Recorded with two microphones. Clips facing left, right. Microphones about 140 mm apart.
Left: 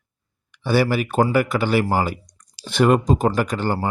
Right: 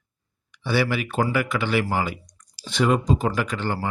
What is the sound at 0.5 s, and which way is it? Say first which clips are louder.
Speech: left 4 dB; 45° left (ahead or behind).